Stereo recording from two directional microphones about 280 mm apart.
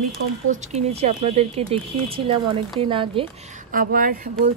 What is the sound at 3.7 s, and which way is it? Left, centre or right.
Speech, right.